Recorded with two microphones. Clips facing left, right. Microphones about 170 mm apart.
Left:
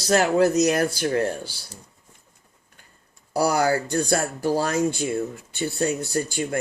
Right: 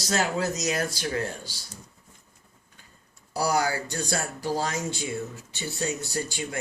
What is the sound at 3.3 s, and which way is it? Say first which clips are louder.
Speech: left 5 dB; 55° left (ahead or behind).